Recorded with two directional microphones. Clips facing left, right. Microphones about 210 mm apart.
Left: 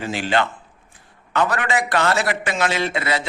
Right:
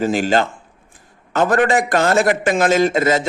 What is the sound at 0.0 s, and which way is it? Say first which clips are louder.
A man's voice: right 5 dB; 45° right (ahead or behind).